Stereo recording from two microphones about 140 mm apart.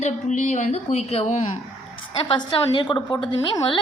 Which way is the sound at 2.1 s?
35° left (ahead or behind).